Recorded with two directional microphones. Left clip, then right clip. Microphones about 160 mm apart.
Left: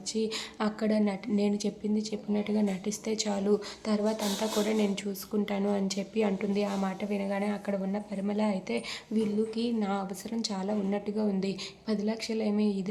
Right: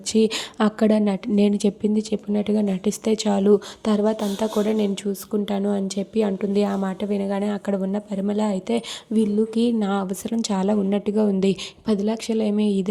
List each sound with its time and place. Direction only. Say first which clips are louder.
0.1 s speech: right 11 dB; 60° right (ahead or behind); by 12.9 s 45° right (ahead or behind)